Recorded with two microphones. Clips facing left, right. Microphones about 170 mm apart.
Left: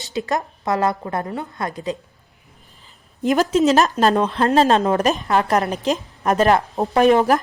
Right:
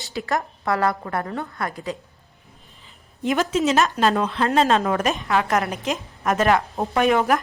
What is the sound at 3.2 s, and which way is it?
A woman's voice, 40° left (ahead or behind).